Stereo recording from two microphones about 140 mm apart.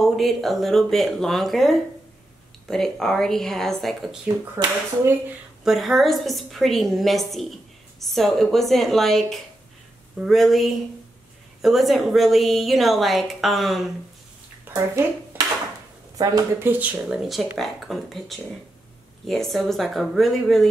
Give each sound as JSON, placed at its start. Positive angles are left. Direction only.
{"t": 0.0, "sound": "a woman's voice", "side_deg": 0}
{"t": 4.6, "sound": "speech", "side_deg": -20}
{"t": 5.6, "sound": "a woman's voice", "side_deg": 0}
{"t": 14.7, "sound": "a woman's voice", "side_deg": -25}
{"t": 16.6, "sound": "a woman's voice", "side_deg": -10}